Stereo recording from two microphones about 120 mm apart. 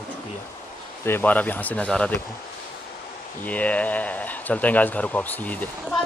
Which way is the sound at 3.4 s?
10° left (ahead or behind).